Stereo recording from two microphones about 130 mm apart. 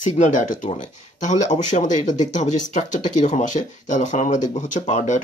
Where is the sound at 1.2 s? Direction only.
70° left (ahead or behind).